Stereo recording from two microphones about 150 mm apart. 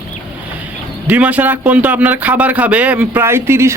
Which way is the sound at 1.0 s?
10° right (ahead or behind).